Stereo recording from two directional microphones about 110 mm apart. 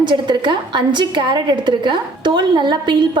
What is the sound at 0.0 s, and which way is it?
A woman's voice, 45° right (ahead or behind).